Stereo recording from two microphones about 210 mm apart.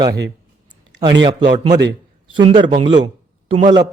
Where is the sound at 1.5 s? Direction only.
25° right (ahead or behind).